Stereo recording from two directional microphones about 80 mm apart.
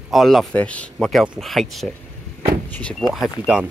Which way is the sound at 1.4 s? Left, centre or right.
Centre.